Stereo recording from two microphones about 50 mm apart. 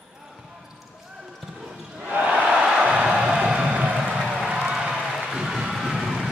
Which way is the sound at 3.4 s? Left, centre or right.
Centre.